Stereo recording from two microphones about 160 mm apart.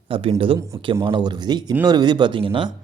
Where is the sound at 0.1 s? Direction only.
35° right (ahead or behind).